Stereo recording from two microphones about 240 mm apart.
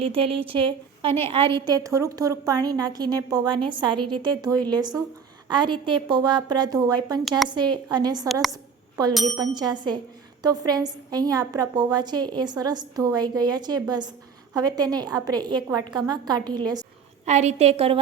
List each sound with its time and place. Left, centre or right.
0.0 s a woman's voice: right
8.3 s a woman's voice: centre
9.4 s a woman's voice: centre
17.2 s a woman's voice: right